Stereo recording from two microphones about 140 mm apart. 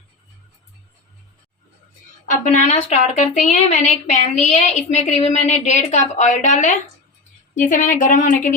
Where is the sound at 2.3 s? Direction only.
60° left (ahead or behind).